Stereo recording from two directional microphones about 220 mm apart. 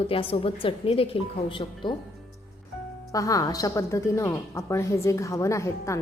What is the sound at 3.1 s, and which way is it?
Speech, 15° left (ahead or behind).